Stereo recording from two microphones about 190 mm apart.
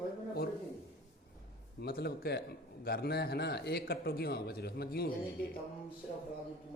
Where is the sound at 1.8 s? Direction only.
55° left (ahead or behind).